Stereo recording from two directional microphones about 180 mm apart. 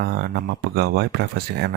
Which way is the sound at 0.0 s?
60° right (ahead or behind).